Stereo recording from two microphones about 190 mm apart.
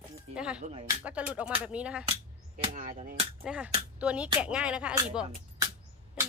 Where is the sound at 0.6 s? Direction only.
30° right (ahead or behind).